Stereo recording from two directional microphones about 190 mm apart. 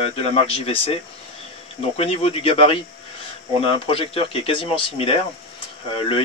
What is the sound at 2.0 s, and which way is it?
Speech, 30° left (ahead or behind).